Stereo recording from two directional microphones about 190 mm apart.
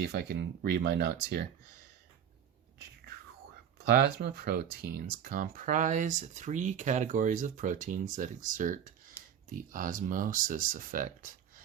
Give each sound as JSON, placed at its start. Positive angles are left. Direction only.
{"t": 0.0, "sound": "speech", "side_deg": -60}
{"t": 3.8, "sound": "speech", "side_deg": -60}